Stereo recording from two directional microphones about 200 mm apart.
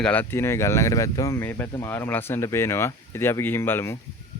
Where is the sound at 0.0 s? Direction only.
10° left (ahead or behind).